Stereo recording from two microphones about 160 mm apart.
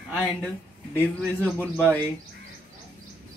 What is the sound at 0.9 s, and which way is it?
Speech, 10° right (ahead or behind).